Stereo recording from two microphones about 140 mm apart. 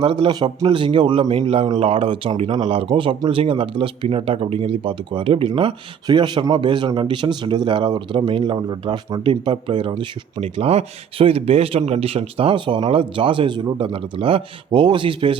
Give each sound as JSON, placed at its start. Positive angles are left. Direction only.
{"t": 0.0, "sound": "speech", "side_deg": -35}
{"t": 2.5, "sound": "speech", "side_deg": -50}